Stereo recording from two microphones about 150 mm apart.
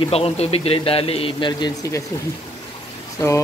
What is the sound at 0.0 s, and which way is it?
Speech, 40° left (ahead or behind).